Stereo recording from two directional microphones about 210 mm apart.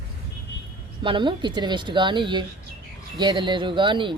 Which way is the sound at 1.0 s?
25° right (ahead or behind).